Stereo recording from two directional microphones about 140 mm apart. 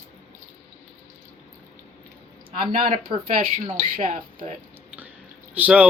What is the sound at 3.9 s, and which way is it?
Speech, 90° right.